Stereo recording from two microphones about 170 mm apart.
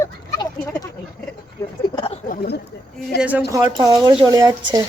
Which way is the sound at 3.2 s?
10° right (ahead or behind).